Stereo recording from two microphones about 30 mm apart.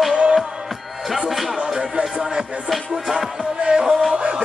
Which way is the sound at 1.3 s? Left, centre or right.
Centre.